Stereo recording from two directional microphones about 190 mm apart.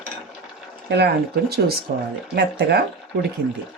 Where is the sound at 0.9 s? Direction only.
55° right (ahead or behind).